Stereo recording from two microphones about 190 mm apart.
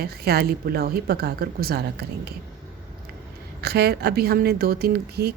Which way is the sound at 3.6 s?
55° right (ahead or behind).